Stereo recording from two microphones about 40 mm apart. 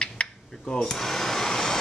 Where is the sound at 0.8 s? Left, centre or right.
Centre.